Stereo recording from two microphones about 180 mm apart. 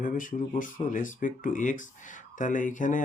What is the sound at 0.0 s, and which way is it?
Speech, 45° left (ahead or behind).